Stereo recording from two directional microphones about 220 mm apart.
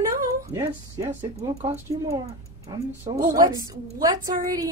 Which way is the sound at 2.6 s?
15° right (ahead or behind).